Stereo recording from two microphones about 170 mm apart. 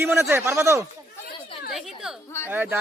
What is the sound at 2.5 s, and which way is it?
Speech, 10° right (ahead or behind).